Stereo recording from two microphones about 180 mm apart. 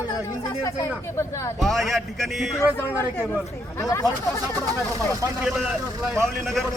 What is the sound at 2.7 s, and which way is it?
Speech, 10° left (ahead or behind).